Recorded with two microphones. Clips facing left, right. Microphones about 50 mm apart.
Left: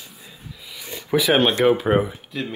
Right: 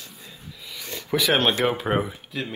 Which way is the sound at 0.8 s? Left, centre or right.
Centre.